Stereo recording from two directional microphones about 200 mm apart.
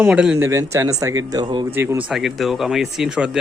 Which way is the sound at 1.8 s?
10° right (ahead or behind).